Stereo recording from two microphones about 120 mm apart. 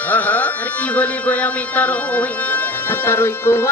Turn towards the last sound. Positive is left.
turn(degrees=20)  # may be behind; listen again after turning